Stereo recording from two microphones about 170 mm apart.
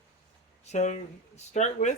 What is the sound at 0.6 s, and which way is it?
A man's voice, 40° left (ahead or behind).